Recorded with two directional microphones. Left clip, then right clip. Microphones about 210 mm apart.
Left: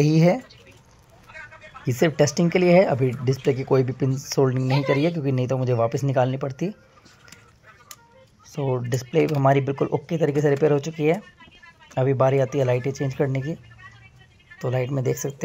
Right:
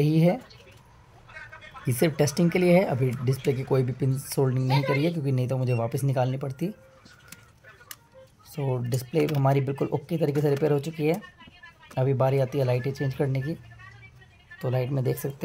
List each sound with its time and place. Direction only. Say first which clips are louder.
0.0 s speech: left 4 dB; 10° left (ahead or behind)
1.9 s speech: left 5 dB; centre (ahead or behind)
8.5 s speech: left 5 dB; 5° right (ahead or behind)
14.6 s speech: left 3 dB; centre (ahead or behind)